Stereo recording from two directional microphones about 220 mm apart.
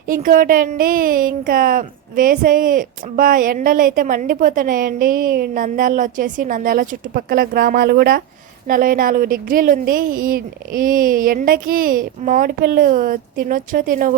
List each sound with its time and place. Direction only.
0.1 s speech: 40° right (ahead or behind)